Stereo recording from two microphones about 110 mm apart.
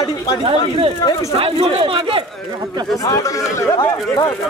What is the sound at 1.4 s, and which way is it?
Speech, 55° right (ahead or behind).